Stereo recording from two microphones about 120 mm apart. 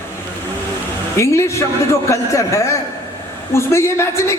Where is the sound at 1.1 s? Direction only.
25° left (ahead or behind).